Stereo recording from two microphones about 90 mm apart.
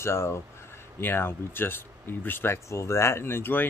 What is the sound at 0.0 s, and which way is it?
Speech, 30° left (ahead or behind).